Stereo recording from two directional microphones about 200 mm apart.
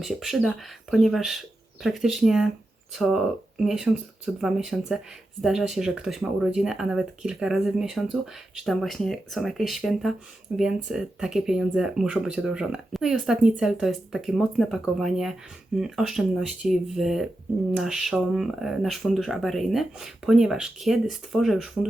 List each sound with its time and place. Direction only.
0.0 s speech: centre (ahead or behind)